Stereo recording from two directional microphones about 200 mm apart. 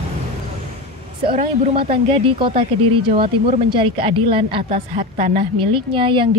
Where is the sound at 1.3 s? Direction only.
30° right (ahead or behind).